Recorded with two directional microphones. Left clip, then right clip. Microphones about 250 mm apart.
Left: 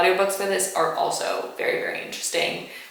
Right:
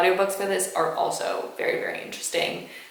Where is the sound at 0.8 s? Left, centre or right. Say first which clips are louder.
Left 2 dB; right.